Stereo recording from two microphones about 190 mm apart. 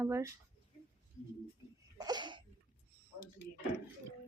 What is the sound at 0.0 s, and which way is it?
Speech, 15° right (ahead or behind).